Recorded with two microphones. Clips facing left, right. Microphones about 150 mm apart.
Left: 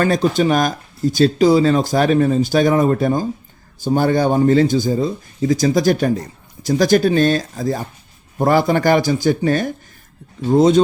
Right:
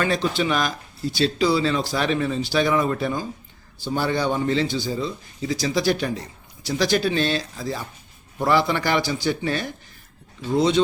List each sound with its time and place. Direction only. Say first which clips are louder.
0.0 s a man's voice: left 7 dB; 45° left (ahead or behind)